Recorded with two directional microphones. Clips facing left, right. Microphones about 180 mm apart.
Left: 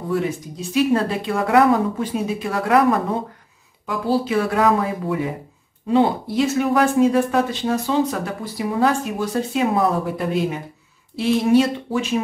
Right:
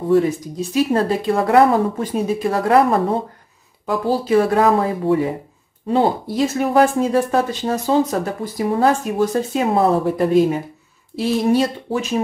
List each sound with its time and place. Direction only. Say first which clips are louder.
0.1 s speech: right 7 dB; 40° right (ahead or behind)